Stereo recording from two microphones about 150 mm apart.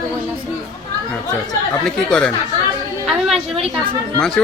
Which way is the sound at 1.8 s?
5° left (ahead or behind).